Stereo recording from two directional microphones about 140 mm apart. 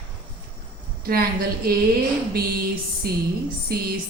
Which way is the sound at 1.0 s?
90° right.